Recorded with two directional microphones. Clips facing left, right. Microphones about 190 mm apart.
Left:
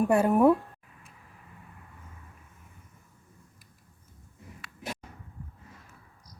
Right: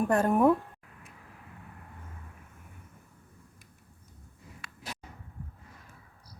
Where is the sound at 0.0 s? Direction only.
10° left (ahead or behind).